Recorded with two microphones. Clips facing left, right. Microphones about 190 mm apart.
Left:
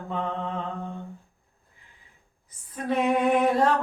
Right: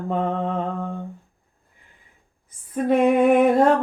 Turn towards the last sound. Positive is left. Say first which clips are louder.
# right 6 dB
turn(degrees=-55)  # may be behind; listen again after turning